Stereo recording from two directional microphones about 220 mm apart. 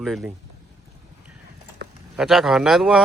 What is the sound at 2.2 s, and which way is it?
Speech, centre (ahead or behind).